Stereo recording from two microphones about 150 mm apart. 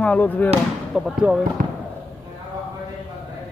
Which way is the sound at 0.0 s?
10° left (ahead or behind).